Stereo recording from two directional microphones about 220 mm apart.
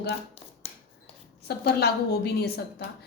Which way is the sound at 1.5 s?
50° left (ahead or behind).